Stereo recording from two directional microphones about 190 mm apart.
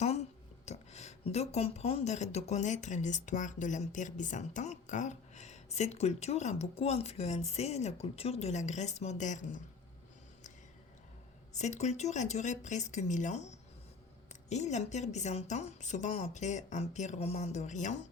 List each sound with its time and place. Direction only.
0.0 s speech: 35° left (ahead or behind)
11.5 s speech: 40° left (ahead or behind)